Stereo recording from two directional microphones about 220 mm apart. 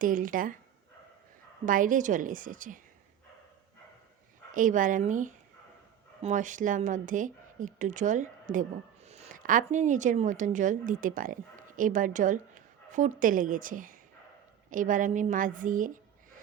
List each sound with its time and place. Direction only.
0.0 s speech: 40° right (ahead or behind)
1.6 s speech: 35° right (ahead or behind)
4.5 s a woman's voice: 35° right (ahead or behind)